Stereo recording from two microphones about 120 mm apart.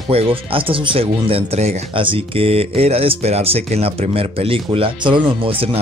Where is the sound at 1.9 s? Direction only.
45° right (ahead or behind).